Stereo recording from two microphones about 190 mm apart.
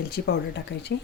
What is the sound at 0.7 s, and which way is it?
Speech, 65° left (ahead or behind).